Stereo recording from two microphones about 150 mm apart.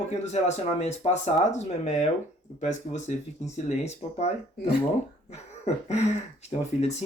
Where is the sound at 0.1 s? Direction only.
50° left (ahead or behind).